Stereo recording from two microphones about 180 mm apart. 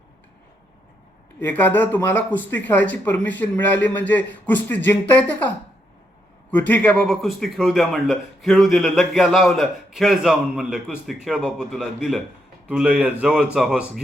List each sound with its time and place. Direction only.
1.4 s speech: 10° left (ahead or behind)
6.5 s a man's voice: 10° left (ahead or behind)